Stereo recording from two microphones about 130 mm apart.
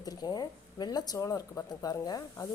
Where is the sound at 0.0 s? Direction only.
30° left (ahead or behind).